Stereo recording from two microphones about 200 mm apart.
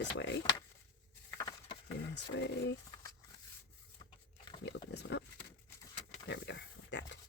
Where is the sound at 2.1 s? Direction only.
60° left (ahead or behind).